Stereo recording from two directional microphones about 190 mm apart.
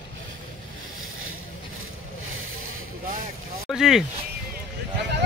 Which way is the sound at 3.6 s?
Centre (ahead or behind).